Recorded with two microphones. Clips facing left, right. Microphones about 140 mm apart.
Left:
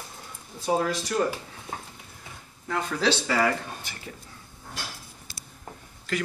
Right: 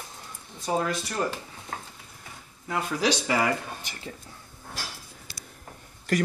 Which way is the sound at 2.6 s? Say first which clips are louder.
Even; 15° right (ahead or behind).